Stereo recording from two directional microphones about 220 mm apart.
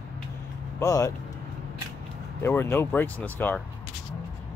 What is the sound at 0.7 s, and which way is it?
Speech, 15° left (ahead or behind).